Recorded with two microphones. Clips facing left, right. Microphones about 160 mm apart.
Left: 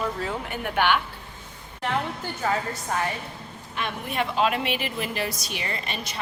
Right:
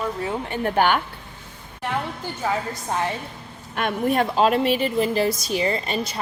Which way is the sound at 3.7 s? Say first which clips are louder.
Right 9 dB; 50° right (ahead or behind).